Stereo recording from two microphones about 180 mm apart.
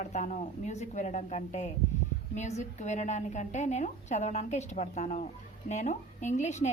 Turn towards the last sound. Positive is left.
turn(degrees=40)  # may be behind; listen again after turning